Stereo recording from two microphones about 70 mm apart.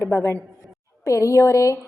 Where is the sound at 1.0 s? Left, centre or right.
Left.